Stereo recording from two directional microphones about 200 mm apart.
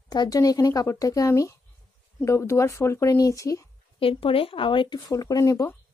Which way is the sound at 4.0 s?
25° left (ahead or behind).